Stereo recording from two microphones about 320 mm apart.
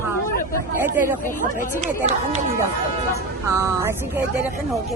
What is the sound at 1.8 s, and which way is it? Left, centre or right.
Speech, right.